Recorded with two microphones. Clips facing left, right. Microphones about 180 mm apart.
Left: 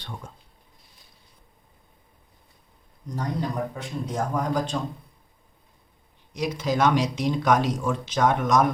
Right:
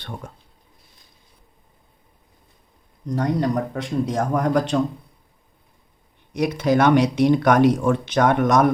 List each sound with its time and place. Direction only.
0.0 s speech: 60° right (ahead or behind)
3.2 s a man's voice: 75° right (ahead or behind)
6.3 s speech: 60° right (ahead or behind)